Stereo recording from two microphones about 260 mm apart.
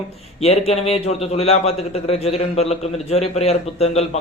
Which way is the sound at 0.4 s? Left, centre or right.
Left.